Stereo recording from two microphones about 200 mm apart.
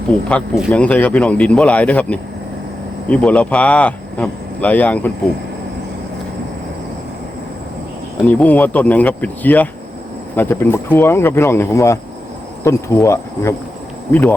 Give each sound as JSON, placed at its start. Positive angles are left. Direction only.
{"t": 0.3, "sound": "speech", "side_deg": 0}
{"t": 8.3, "sound": "speech", "side_deg": 5}